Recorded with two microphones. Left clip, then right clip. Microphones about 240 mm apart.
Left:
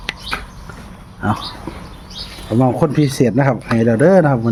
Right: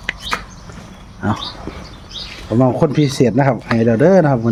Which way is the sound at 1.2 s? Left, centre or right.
Centre.